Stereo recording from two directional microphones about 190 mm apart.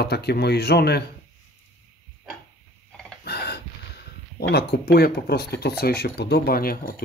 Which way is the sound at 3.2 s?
60° left (ahead or behind).